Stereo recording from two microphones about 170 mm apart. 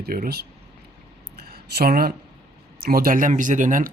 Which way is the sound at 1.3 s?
65° right (ahead or behind).